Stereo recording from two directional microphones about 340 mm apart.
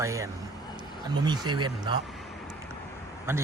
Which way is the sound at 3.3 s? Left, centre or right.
Centre.